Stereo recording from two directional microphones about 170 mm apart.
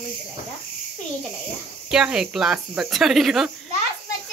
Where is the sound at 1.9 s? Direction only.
5° right (ahead or behind).